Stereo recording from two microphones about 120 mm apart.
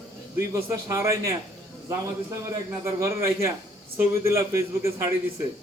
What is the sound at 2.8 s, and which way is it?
A man's voice, 25° right (ahead or behind).